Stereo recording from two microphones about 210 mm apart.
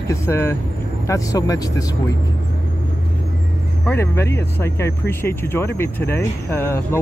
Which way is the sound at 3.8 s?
10° left (ahead or behind).